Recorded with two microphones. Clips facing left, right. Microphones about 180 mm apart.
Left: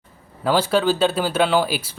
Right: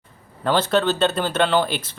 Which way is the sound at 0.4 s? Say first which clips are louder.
Left 1 dB; 10° left (ahead or behind).